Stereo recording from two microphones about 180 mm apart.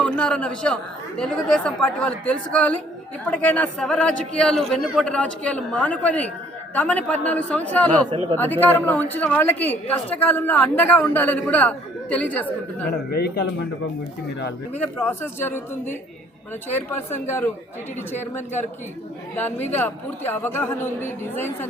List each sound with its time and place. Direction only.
0.0 s a man's voice: 5° left (ahead or behind)
12.9 s speech: 60° left (ahead or behind)
14.7 s a woman's voice: 10° left (ahead or behind)
16.7 s a woman's voice: 15° left (ahead or behind)
19.4 s a woman's voice: 10° left (ahead or behind)